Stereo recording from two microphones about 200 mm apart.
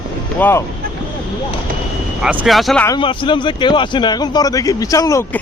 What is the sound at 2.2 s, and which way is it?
Speech, 5° right (ahead or behind).